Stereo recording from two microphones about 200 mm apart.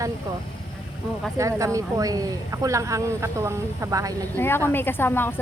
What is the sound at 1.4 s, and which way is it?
Speech, 15° right (ahead or behind).